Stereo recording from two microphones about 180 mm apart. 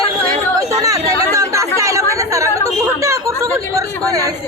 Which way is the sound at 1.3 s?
15° right (ahead or behind).